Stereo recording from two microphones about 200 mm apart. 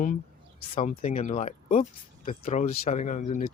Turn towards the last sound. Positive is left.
turn(degrees=35)  # may be behind; listen again after turning